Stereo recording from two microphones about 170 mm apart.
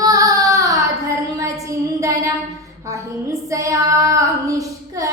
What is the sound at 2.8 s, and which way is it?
Child singing, 20° right (ahead or behind).